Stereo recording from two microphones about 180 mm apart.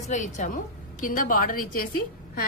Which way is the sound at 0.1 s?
45° left (ahead or behind).